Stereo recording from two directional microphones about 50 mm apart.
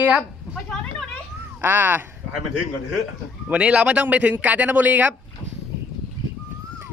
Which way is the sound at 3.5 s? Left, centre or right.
Right.